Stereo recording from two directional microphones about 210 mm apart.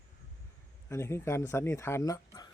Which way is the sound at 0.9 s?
15° left (ahead or behind).